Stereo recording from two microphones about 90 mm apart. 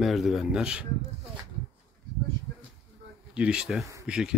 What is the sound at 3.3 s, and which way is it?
Speech, 10° right (ahead or behind).